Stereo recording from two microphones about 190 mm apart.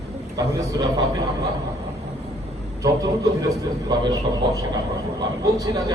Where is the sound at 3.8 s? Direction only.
20° right (ahead or behind).